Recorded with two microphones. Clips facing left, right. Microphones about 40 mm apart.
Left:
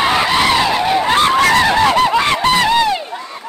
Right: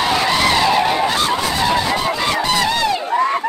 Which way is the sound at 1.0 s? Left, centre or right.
Left.